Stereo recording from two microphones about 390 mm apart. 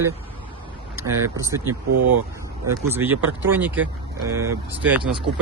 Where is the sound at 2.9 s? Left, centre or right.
Centre.